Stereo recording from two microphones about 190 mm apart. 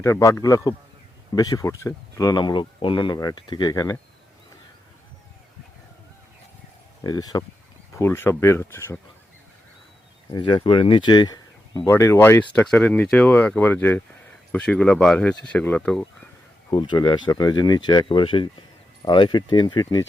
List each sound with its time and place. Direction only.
0.0 s speech: 15° left (ahead or behind)
7.0 s speech: 20° left (ahead or behind)
10.3 s speech: 25° left (ahead or behind); by 16.0 s 5° left (ahead or behind)
16.6 s speech: 25° left (ahead or behind)